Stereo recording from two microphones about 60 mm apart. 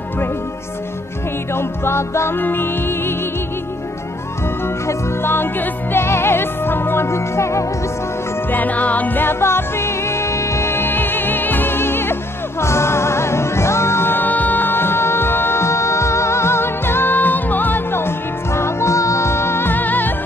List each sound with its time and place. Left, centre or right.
1.5 s music: left
4.6 s music: left
8.5 s music: left